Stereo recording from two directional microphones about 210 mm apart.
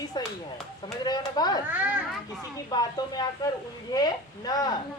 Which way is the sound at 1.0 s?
20° left (ahead or behind).